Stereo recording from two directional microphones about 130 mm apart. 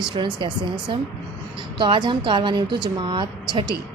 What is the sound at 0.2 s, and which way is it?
A woman's voice, 35° right (ahead or behind).